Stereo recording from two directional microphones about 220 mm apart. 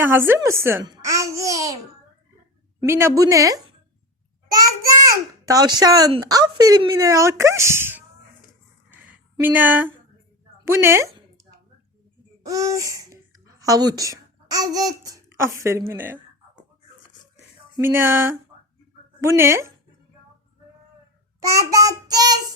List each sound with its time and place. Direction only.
0.0 s a child's voice: 10° right (ahead or behind)
2.8 s a woman's voice: 10° right (ahead or behind)
5.5 s a woman's voice: 15° right (ahead or behind)
8.9 s a sound: 10° right (ahead or behind)
10.7 s a woman's voice: 10° right (ahead or behind)
12.4 s babbling: 15° right (ahead or behind)
13.6 s speech: 15° right (ahead or behind)
17.7 s a woman's voice: 10° right (ahead or behind)
21.4 s a woman's voice: 15° right (ahead or behind)